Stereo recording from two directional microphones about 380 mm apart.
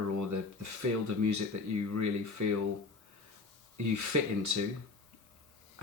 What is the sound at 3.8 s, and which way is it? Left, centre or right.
Speech, right.